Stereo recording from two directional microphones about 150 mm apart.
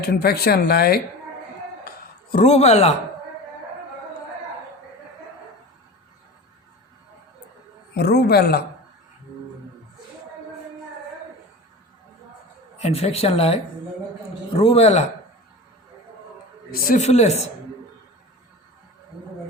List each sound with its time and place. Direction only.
0.0 s speech: 90° left
2.3 s speech: 50° left (ahead or behind)
7.9 s speech: 90° left
12.8 s a man's voice: 40° left (ahead or behind)
16.7 s speech: 75° left (ahead or behind)
17.0 s speech: 50° left (ahead or behind)